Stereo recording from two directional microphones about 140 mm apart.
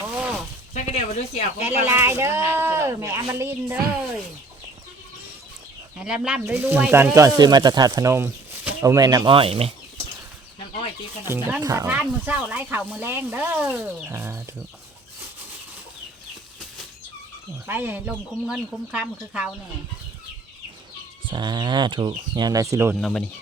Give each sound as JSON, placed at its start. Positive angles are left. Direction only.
{"t": 0.1, "sound": "a sound", "side_deg": -10}
{"t": 0.7, "sound": "speech", "side_deg": 60}
{"t": 1.6, "sound": "speech", "side_deg": -15}
{"t": 6.0, "sound": "speech", "side_deg": -5}
{"t": 9.3, "sound": "speech", "side_deg": -40}
{"t": 11.3, "sound": "speech", "side_deg": -15}
{"t": 11.9, "sound": "speech", "side_deg": -10}
{"t": 17.7, "sound": "speech", "side_deg": -15}
{"t": 21.2, "sound": "speech", "side_deg": -30}
{"t": 23.0, "sound": "speech", "side_deg": 5}